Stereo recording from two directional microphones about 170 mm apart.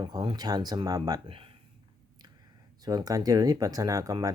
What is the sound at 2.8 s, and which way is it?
Speech, 20° right (ahead or behind).